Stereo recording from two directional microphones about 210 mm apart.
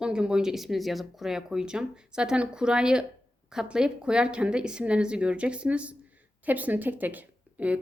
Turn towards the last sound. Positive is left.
turn(degrees=-5)  # may be behind; listen again after turning